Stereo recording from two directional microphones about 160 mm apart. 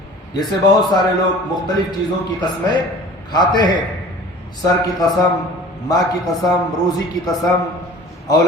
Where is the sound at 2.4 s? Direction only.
25° left (ahead or behind).